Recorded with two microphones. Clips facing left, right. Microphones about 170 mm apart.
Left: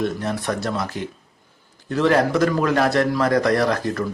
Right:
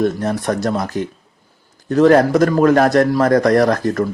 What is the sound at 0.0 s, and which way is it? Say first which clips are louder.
Speech: right 6 dB; 45° right (ahead or behind).